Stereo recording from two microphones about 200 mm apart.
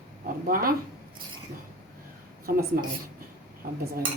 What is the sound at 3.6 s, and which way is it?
Speech, 50° right (ahead or behind).